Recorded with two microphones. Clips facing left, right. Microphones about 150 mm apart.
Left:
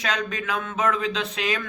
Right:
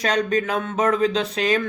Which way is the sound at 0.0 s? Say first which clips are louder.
Right 7 dB; 40° right (ahead or behind).